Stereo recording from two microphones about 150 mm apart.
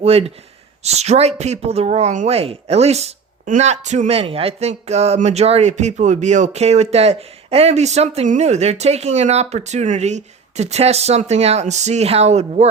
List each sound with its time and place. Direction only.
0.0 s speech: 40° right (ahead or behind)